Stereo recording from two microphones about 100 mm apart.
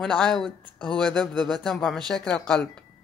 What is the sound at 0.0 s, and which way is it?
Speech, 5° left (ahead or behind).